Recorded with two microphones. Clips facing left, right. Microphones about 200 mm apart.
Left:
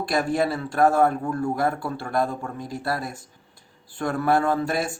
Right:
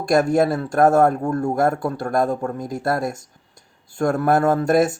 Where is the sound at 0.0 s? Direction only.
45° right (ahead or behind).